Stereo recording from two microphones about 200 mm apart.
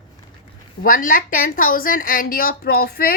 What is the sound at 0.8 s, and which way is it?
Speech, 45° left (ahead or behind).